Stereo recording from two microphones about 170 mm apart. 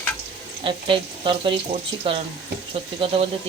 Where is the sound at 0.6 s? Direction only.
30° right (ahead or behind).